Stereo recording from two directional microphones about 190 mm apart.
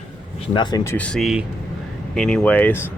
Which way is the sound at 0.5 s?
20° left (ahead or behind).